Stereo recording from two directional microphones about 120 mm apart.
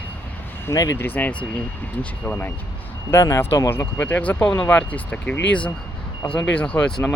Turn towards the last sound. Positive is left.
turn(degrees=10)  # may be behind; listen again after turning